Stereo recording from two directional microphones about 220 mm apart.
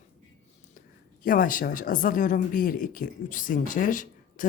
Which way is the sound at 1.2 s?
40° left (ahead or behind).